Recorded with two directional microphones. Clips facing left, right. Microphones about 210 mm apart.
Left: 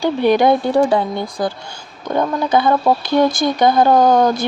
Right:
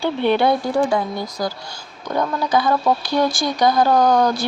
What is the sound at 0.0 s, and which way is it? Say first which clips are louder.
Speech: left 4 dB; 15° left (ahead or behind).